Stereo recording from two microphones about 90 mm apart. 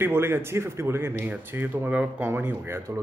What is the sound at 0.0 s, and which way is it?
Speech, 25° right (ahead or behind).